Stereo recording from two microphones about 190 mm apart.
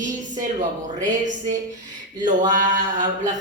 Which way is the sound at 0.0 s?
40° right (ahead or behind).